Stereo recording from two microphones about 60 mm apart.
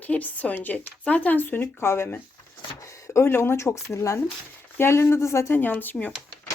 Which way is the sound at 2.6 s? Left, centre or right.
Left.